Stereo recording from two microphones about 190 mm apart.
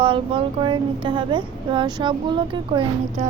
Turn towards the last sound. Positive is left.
turn(degrees=-25)  # may be behind; listen again after turning